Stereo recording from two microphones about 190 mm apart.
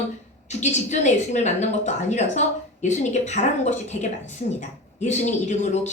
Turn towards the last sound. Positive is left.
turn(degrees=40)  # may be behind; listen again after turning